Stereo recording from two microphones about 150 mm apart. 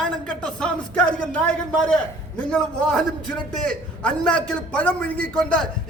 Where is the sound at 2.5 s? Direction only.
5° left (ahead or behind).